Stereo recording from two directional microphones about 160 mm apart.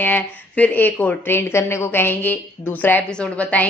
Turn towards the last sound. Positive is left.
turn(degrees=10)  # may be behind; listen again after turning